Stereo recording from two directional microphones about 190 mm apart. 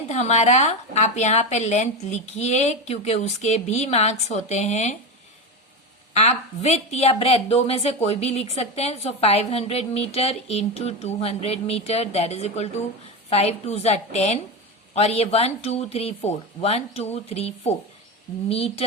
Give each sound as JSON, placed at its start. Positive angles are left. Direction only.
{"t": 0.1, "sound": "a woman's voice", "side_deg": 35}
{"t": 6.1, "sound": "a woman's voice", "side_deg": 35}